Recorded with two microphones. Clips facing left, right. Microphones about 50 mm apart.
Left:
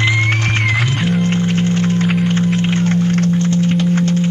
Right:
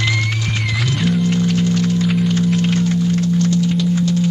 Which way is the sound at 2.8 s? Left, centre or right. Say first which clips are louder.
Left 2 dB; left.